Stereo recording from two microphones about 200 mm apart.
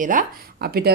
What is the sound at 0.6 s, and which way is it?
Speech, 50° right (ahead or behind).